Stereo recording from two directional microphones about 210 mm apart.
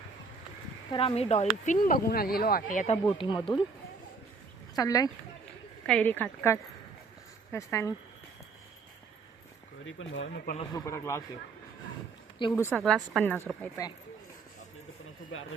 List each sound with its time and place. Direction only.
0.9 s speech: 25° left (ahead or behind)
4.7 s speech: 15° left (ahead or behind)
5.8 s a woman's voice: 5° left (ahead or behind)
9.8 s speech: 65° left (ahead or behind); by 10.6 s 45° left (ahead or behind)
10.6 s a woman's voice: 15° left (ahead or behind)
12.4 s a woman's voice: 15° left (ahead or behind)
12.8 s a woman's voice: centre (ahead or behind)
15.3 s speech: 80° left